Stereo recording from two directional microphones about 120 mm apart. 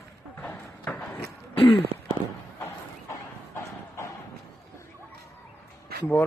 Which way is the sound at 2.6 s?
20° left (ahead or behind).